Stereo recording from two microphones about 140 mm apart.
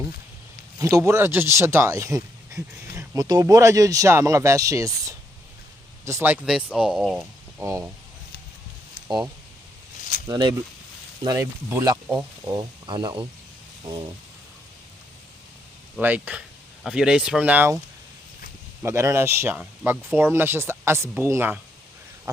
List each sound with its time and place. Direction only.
0.8 s speech: 25° right (ahead or behind); by 7.2 s centre (ahead or behind)
7.6 s speech: 20° right (ahead or behind)
9.0 s speech: 30° right (ahead or behind)
16.0 s speech: 10° right (ahead or behind)
18.8 s speech: 20° right (ahead or behind)